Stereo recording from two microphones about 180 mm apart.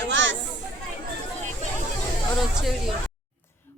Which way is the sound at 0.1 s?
90° right.